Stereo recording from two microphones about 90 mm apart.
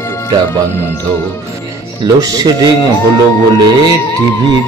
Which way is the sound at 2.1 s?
45° right (ahead or behind).